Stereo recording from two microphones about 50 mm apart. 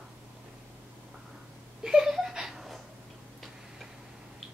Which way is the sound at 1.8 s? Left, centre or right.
Centre.